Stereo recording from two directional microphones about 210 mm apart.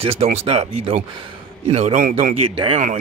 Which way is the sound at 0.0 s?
30° right (ahead or behind).